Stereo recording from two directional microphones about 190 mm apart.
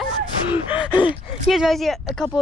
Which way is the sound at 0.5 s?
10° right (ahead or behind).